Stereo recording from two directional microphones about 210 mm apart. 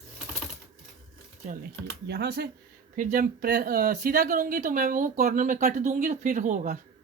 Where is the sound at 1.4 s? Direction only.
50° right (ahead or behind).